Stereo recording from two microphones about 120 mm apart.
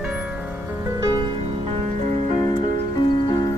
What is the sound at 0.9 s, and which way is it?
Music, 40° right (ahead or behind).